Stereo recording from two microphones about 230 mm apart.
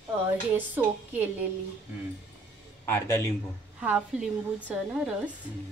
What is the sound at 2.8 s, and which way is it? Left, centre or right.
Speech, centre.